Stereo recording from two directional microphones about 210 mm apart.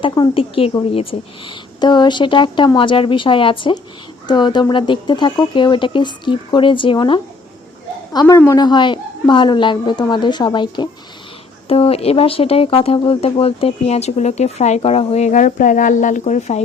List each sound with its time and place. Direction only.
0.0 s speech: 20° left (ahead or behind)